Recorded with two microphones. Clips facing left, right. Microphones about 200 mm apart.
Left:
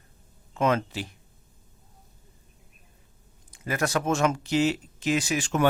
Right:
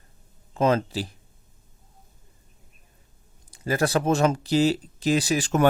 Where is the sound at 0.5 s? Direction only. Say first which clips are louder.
Right 3 dB; 35° right (ahead or behind).